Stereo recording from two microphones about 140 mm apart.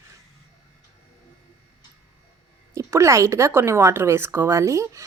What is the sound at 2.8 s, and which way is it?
Speech, 20° right (ahead or behind).